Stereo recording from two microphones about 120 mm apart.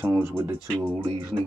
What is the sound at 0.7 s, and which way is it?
Speech, 10° left (ahead or behind).